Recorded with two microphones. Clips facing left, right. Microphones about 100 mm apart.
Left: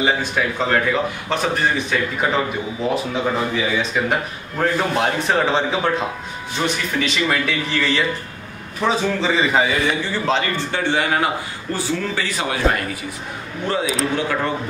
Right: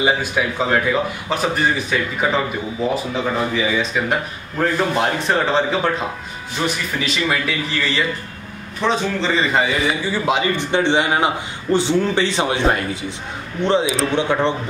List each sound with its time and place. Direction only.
0.0 s a man's voice: 10° right (ahead or behind)
10.1 s a man's voice: 15° right (ahead or behind)